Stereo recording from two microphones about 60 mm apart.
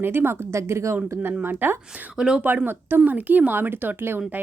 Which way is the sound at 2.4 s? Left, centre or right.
Right.